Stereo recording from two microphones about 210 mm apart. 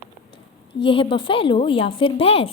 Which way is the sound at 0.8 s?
25° left (ahead or behind).